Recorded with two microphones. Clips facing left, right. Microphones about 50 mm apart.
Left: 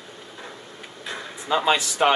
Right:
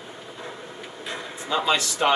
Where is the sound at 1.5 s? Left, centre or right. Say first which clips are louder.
Left 2 dB; centre.